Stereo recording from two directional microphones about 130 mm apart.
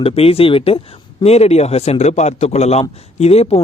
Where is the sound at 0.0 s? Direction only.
45° left (ahead or behind).